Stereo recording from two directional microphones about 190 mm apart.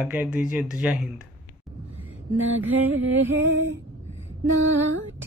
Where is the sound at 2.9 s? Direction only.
90° right.